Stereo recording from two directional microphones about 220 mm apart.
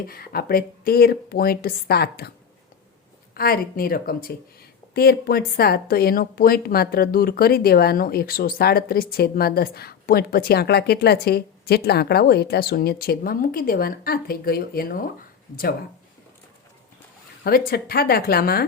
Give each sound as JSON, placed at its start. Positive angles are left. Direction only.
{"t": 0.0, "sound": "speech", "side_deg": 40}
{"t": 3.3, "sound": "speech", "side_deg": 45}
{"t": 17.4, "sound": "speech", "side_deg": 45}